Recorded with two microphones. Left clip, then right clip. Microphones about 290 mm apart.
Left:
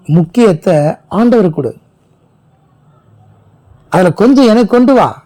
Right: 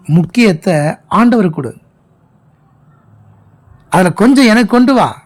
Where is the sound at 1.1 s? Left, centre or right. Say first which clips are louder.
Left 1 dB; centre.